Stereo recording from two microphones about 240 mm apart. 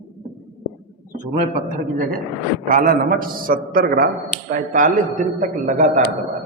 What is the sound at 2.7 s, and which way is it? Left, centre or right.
A man's voice, right.